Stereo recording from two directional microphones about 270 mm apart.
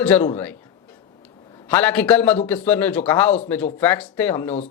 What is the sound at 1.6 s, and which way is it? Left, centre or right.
A man's voice, centre.